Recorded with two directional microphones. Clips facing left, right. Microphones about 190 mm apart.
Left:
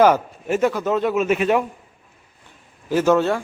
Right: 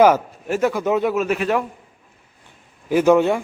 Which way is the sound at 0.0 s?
5° right (ahead or behind).